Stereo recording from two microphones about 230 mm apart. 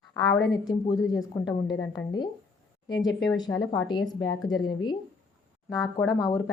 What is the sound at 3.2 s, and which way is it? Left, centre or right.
Speech, centre.